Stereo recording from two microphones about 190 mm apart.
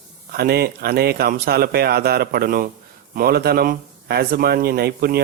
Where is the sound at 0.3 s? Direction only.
55° right (ahead or behind).